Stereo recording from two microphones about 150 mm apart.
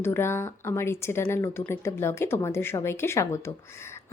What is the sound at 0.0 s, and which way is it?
A woman's voice, 15° left (ahead or behind).